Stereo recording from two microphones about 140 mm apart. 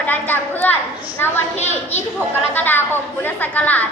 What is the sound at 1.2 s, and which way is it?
A woman's voice, 15° left (ahead or behind).